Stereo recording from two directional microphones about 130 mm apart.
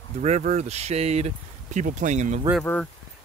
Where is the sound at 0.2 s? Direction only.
60° right (ahead or behind).